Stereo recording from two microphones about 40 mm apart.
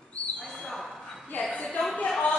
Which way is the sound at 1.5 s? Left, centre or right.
Left.